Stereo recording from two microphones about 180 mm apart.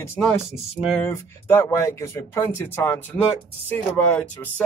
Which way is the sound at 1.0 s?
10° left (ahead or behind).